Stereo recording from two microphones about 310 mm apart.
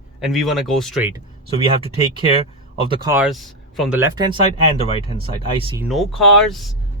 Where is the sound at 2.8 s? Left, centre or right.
Centre.